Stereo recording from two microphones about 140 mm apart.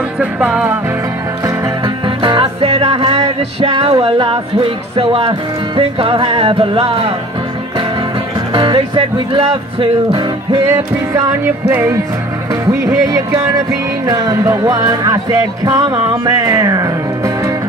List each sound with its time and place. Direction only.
0.2 s music: 10° right (ahead or behind)
2.0 s music: 35° right (ahead or behind)
8.5 s music: 40° right (ahead or behind)
10.5 s music: 20° right (ahead or behind)
12.6 s speech: 20° right (ahead or behind)
14.0 s music: 25° right (ahead or behind)